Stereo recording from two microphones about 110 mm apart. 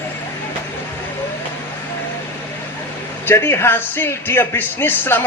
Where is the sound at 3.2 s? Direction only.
20° left (ahead or behind).